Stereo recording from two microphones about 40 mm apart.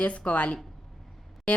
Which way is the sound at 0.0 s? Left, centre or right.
Left.